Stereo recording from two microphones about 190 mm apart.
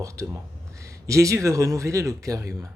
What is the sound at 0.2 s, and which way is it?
Speech, 15° right (ahead or behind).